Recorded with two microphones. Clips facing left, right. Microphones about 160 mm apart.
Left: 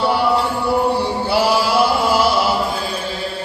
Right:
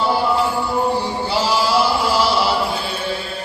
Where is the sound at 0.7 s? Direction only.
65° left (ahead or behind).